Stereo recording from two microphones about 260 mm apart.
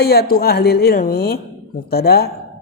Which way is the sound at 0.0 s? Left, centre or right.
Left.